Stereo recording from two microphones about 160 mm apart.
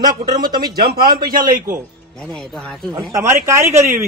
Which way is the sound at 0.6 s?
75° right (ahead or behind).